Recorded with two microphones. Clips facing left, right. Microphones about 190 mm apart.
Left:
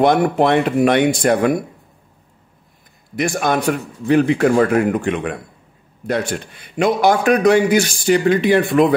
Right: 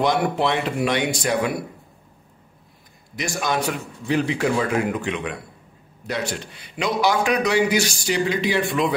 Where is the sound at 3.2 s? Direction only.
55° left (ahead or behind).